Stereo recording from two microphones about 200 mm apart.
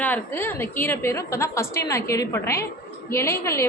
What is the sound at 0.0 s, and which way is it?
A woman's voice, 10° left (ahead or behind).